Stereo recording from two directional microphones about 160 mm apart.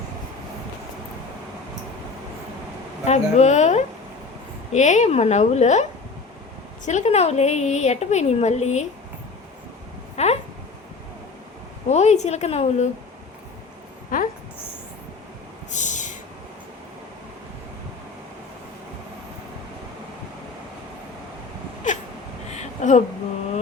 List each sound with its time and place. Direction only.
3.1 s a woman's voice: 45° left (ahead or behind)
6.8 s a woman's voice: 45° left (ahead or behind)
10.2 s a woman's voice: 45° left (ahead or behind)
11.9 s a woman's voice: 45° left (ahead or behind)
14.1 s speech: 60° left (ahead or behind)
15.7 s a sound: 50° left (ahead or behind)
22.4 s a sound: 45° left (ahead or behind)